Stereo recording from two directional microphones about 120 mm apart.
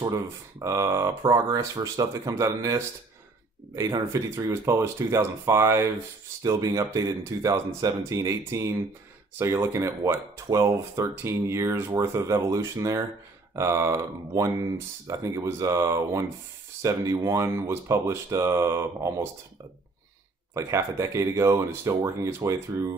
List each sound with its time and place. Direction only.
0.0 s speech: 25° right (ahead or behind)
4.1 s speech: 25° right (ahead or behind)
20.5 s speech: 25° right (ahead or behind)